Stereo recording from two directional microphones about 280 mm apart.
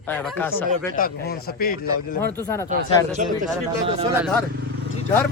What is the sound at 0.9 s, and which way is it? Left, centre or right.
Speech, left.